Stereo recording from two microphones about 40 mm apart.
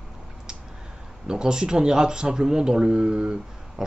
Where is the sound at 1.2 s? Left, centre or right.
Centre.